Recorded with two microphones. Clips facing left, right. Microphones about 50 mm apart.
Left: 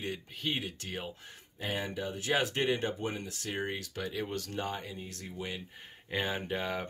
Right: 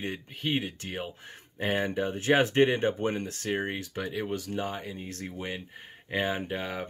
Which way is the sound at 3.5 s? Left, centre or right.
Right.